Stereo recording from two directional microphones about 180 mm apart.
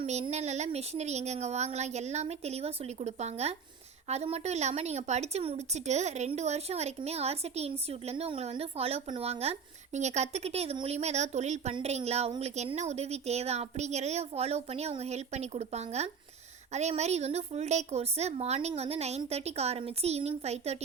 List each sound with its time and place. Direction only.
0.0 s speech: 40° right (ahead or behind)